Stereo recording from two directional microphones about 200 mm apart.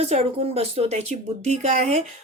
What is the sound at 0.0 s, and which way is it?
Speech, 30° right (ahead or behind).